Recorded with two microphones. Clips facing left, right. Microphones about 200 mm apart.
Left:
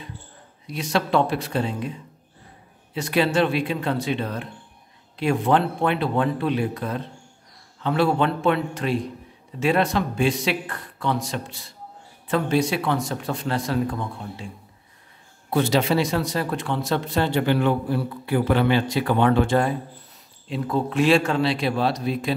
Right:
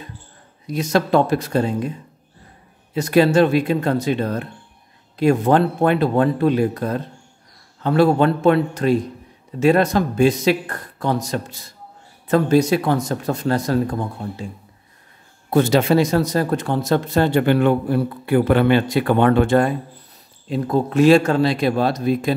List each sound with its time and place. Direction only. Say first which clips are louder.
0.7 s speech: right 5 dB; 40° right (ahead or behind)
2.9 s speech: right 7 dB; 45° right (ahead or behind)
15.5 s speech: right 5 dB; 45° right (ahead or behind)
20.4 s speech: right 5 dB; 40° right (ahead or behind)